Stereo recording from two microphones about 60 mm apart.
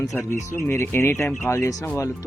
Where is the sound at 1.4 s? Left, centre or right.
Left.